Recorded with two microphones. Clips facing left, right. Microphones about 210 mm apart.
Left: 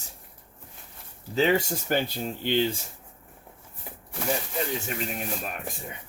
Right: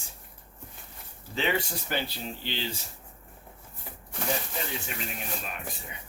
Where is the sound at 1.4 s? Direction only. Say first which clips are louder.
Left 6 dB; 40° left (ahead or behind).